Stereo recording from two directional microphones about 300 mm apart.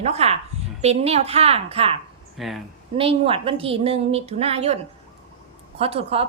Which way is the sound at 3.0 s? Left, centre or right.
Centre.